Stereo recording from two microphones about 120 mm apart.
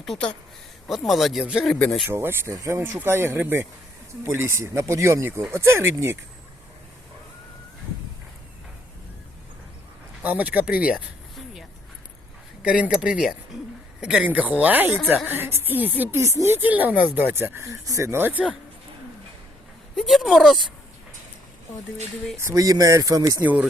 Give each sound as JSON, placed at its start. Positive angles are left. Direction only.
{"t": 0.0, "sound": "speech", "side_deg": 5}
{"t": 2.0, "sound": "speech", "side_deg": -20}
{"t": 10.2, "sound": "speech", "side_deg": -15}
{"t": 12.6, "sound": "speech", "side_deg": -10}
{"t": 20.0, "sound": "speech", "side_deg": 0}
{"t": 22.4, "sound": "speech", "side_deg": -25}
{"t": 23.4, "sound": "speech", "side_deg": -10}